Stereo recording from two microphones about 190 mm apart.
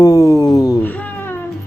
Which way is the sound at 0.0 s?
15° left (ahead or behind).